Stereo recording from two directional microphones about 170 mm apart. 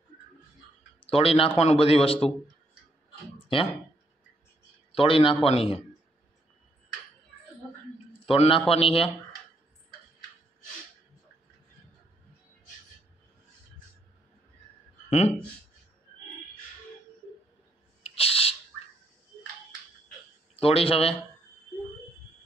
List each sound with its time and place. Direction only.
1.1 s a man's voice: 35° left (ahead or behind)
3.5 s a man's voice: 30° left (ahead or behind)
4.9 s a man's voice: 30° left (ahead or behind)
8.3 s a man's voice: 30° left (ahead or behind)
15.0 s speech: 40° left (ahead or behind)
18.1 s owl: 35° left (ahead or behind)
20.5 s a man's voice: 35° left (ahead or behind)